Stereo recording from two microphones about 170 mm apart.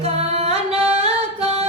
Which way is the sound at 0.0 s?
35° right (ahead or behind).